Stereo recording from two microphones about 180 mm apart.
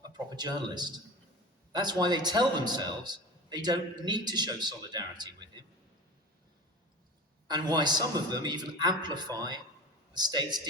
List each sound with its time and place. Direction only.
0.1 s a man's voice: 25° right (ahead or behind)
7.4 s a man's voice: 25° right (ahead or behind)